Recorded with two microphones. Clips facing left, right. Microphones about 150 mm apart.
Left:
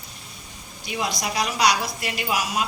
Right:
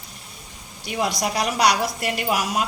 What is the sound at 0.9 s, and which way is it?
A woman's voice, 55° right (ahead or behind).